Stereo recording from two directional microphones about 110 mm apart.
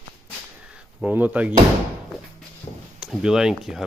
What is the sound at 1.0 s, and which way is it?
Speech, 15° right (ahead or behind).